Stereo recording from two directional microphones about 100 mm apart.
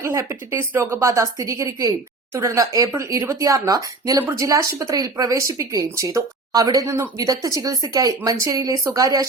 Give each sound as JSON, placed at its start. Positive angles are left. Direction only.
{"t": 0.0, "sound": "a woman's voice", "side_deg": -30}